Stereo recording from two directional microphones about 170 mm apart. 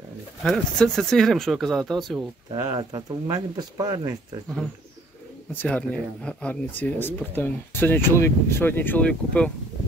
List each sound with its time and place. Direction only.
0.4 s speech: centre (ahead or behind)
2.5 s speech: 20° right (ahead or behind)
5.5 s speech: 10° left (ahead or behind)